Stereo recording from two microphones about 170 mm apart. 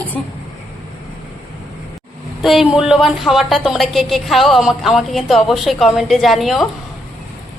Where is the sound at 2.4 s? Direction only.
Centre (ahead or behind).